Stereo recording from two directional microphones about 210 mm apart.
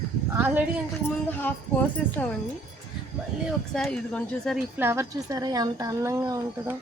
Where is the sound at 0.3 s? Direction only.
10° right (ahead or behind).